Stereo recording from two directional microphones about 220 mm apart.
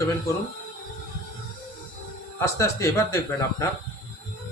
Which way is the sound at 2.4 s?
15° left (ahead or behind).